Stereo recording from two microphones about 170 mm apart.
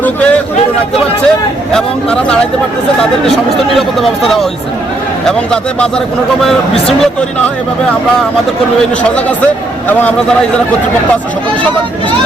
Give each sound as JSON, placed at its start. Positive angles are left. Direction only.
{"t": 0.0, "sound": "a man's voice", "side_deg": 10}
{"t": 1.7, "sound": "speech", "side_deg": 5}
{"t": 3.8, "sound": "speech", "side_deg": 0}
{"t": 9.9, "sound": "a man's voice", "side_deg": 10}